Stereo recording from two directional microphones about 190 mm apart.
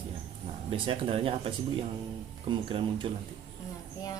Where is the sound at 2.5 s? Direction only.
25° right (ahead or behind).